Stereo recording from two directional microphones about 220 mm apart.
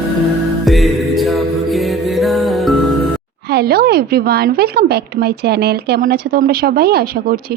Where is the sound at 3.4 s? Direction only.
45° right (ahead or behind).